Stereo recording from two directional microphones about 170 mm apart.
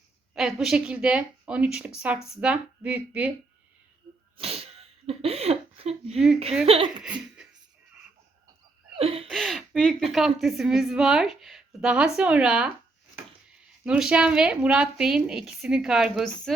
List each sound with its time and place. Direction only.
0.3 s speech: 5° right (ahead or behind)
4.4 s sneeze: 35° right (ahead or behind)
6.1 s speech: 5° right (ahead or behind)
6.7 s speech: 30° right (ahead or behind)
7.0 s laughter: 5° right (ahead or behind)
9.0 s a sound: 35° right (ahead or behind)
9.3 s speech: centre (ahead or behind)
13.8 s speech: 5° right (ahead or behind)